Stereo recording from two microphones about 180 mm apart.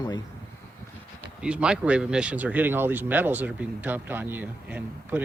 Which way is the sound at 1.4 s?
5° right (ahead or behind).